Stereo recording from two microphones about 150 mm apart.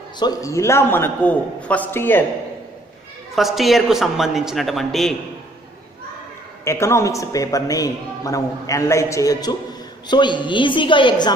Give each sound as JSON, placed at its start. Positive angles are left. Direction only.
{"t": 0.2, "sound": "a man's voice", "side_deg": 20}
{"t": 3.3, "sound": "a man's voice", "side_deg": 0}
{"t": 6.6, "sound": "a woman's voice", "side_deg": 20}